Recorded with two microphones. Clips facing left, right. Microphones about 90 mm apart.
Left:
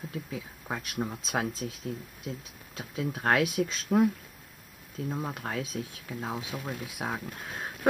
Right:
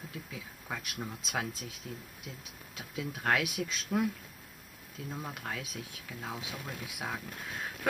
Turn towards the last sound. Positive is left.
turn(degrees=25)  # may be behind; listen again after turning